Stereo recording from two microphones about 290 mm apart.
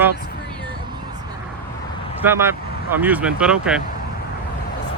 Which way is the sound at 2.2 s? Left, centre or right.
Centre.